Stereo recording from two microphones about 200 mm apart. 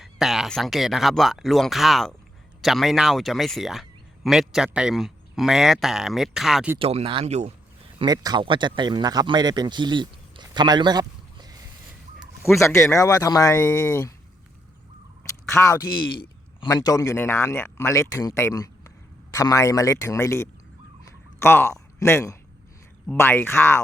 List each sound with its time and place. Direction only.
0.0 s speech: centre (ahead or behind)
6.7 s speech: 30° right (ahead or behind)
7.9 s a man's voice: 20° right (ahead or behind)
12.5 s speech: 15° left (ahead or behind)
15.4 s speech: 15° left (ahead or behind)
21.0 s a sound: 15° left (ahead or behind)
23.0 s speech: 10° left (ahead or behind)